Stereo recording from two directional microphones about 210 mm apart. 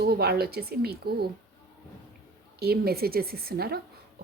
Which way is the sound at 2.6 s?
50° right (ahead or behind).